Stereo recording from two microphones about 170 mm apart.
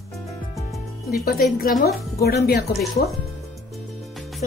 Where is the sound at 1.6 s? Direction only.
55° left (ahead or behind).